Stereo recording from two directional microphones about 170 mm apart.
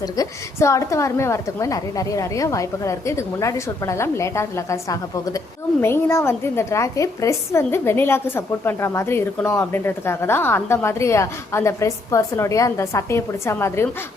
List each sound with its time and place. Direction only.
0.0 s a woman's voice: 20° left (ahead or behind)